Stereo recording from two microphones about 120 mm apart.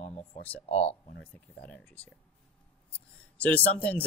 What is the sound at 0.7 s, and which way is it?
Speech, 55° left (ahead or behind).